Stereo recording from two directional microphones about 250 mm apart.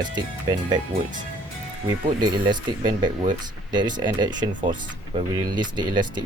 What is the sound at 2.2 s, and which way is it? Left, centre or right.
Speech, centre.